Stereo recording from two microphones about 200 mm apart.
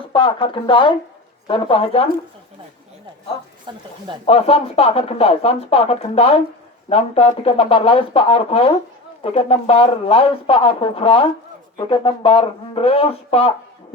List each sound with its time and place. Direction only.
0.1 s speech: 25° left (ahead or behind)
3.7 s speech: 20° right (ahead or behind)
4.3 s speech: 30° left (ahead or behind)